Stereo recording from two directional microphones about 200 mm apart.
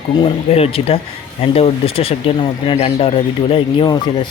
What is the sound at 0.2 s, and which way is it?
Speech, 30° left (ahead or behind).